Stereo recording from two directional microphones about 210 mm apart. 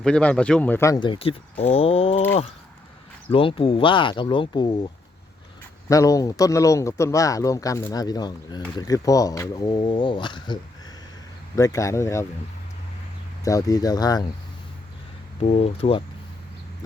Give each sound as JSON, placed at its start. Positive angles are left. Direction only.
{"t": 0.0, "sound": "speech", "side_deg": 5}
{"t": 3.3, "sound": "speech", "side_deg": 25}
{"t": 5.9, "sound": "speech", "side_deg": 15}
{"t": 13.4, "sound": "speech", "side_deg": 15}
{"t": 15.4, "sound": "speech", "side_deg": 30}